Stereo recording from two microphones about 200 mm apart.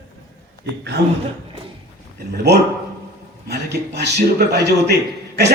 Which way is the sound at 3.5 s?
55° right (ahead or behind).